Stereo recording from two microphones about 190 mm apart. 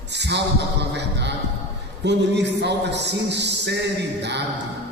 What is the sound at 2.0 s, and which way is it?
A man's voice, 65° right (ahead or behind).